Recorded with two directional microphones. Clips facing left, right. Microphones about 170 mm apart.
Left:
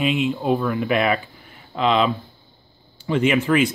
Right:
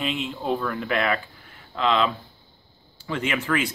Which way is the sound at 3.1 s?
20° left (ahead or behind).